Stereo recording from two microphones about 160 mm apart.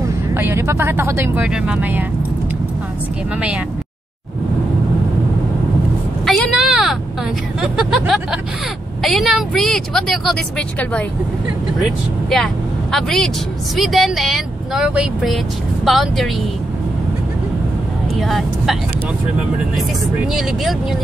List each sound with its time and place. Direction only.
0.0 s speech: 15° right (ahead or behind)
6.2 s a sound: 5° left (ahead or behind)
7.6 s speech: 5° right (ahead or behind)
18.1 s speech: centre (ahead or behind)